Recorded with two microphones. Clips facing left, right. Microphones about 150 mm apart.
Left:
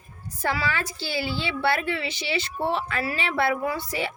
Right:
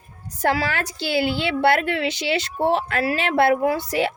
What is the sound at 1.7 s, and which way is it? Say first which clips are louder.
A woman's voice: right 6 dB; 65° right (ahead or behind).